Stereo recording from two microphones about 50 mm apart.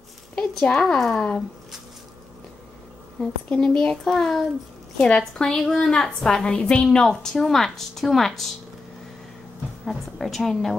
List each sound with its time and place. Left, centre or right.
0.4 s a sound: left
0.9 s a woman's voice: centre
3.5 s a woman's voice: centre
7.0 s a woman's voice: centre
9.8 s a woman's voice: centre